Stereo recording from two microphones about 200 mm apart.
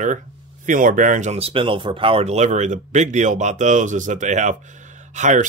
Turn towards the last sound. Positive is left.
turn(degrees=-35)  # may be behind; listen again after turning